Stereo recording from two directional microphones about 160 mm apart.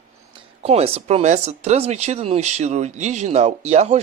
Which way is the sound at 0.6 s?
40° right (ahead or behind).